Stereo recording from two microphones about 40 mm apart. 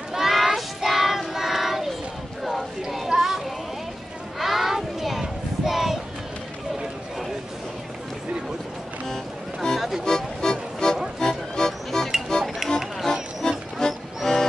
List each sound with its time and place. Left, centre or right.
0.1 s child singing: centre
2.4 s a sound: centre
4.4 s child singing: centre
9.0 s music: centre
9.8 s music: centre
10.0 s music: centre
12.6 s music: centre